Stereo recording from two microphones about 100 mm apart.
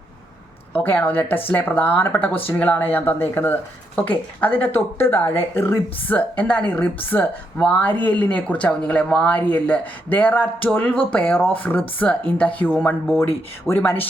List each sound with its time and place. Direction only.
0.7 s a woman's voice: 15° left (ahead or behind)